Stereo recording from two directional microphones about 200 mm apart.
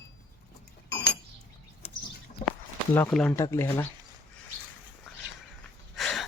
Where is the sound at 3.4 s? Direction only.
15° left (ahead or behind).